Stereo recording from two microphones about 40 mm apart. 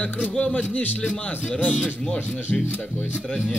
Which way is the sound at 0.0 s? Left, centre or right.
Left.